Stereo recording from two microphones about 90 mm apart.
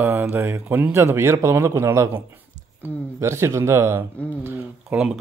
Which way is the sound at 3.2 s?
30° right (ahead or behind).